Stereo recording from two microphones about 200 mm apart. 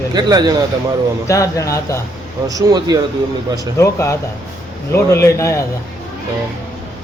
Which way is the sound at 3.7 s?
15° left (ahead or behind).